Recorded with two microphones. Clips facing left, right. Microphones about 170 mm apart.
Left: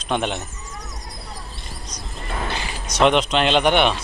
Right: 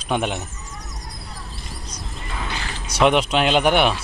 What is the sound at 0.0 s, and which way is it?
Speech, 5° right (ahead or behind).